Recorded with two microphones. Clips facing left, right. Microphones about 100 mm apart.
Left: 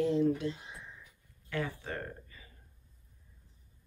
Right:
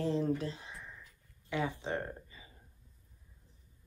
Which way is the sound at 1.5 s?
20° right (ahead or behind).